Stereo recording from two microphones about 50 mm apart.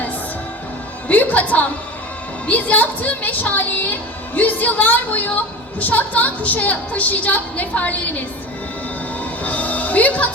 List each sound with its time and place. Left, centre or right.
1.0 s a woman's voice: left
9.4 s music: left